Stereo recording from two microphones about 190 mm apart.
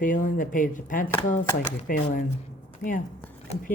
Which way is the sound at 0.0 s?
45° left (ahead or behind).